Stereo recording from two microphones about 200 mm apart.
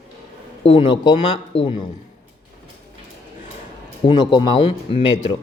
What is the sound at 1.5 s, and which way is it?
Speech, 70° left (ahead or behind).